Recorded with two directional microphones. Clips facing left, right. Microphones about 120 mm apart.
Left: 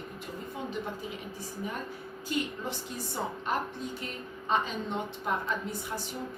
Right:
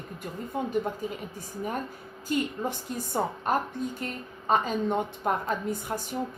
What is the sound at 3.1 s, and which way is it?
A woman's voice, 45° right (ahead or behind).